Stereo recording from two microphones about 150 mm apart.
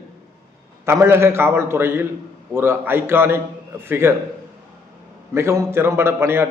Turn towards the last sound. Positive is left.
turn(degrees=-15)  # may be behind; listen again after turning